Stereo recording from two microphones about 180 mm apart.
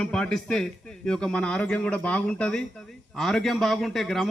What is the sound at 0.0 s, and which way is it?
A man's voice, 5° left (ahead or behind).